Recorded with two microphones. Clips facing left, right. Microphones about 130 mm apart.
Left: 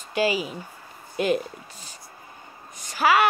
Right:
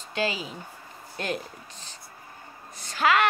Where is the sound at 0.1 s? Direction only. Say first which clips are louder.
Left 5 dB; 5° left (ahead or behind).